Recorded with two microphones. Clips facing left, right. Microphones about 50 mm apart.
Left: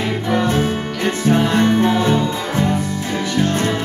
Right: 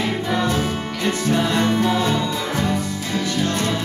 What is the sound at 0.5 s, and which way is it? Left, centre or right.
Music, left.